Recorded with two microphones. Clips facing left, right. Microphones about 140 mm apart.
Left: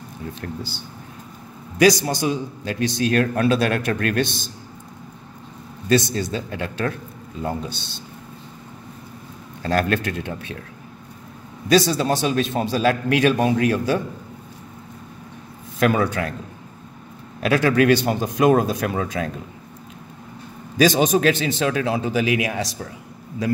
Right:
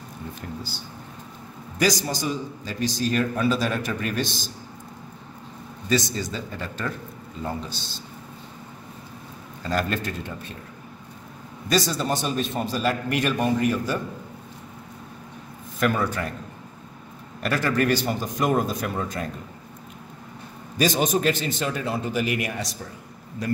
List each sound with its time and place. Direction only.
0.3 s a man's voice: 70° left (ahead or behind)
1.8 s a man's voice: 65° left (ahead or behind)
5.9 s a man's voice: 60° left (ahead or behind)
9.6 s a man's voice: 65° left (ahead or behind)
11.7 s a man's voice: 75° left (ahead or behind); by 13.9 s 90° left
15.8 s a man's voice: 85° left
17.4 s a man's voice: 70° left (ahead or behind)
20.7 s a man's voice: 90° left